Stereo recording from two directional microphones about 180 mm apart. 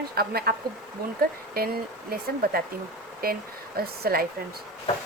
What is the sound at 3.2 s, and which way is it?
A woman's voice, 55° right (ahead or behind).